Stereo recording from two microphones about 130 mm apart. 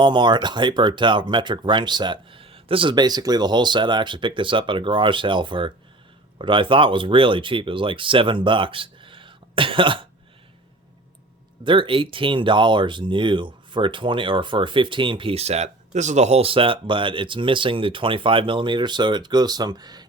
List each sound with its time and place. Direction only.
0.0 s speech: 35° right (ahead or behind)
11.6 s speech: 40° right (ahead or behind)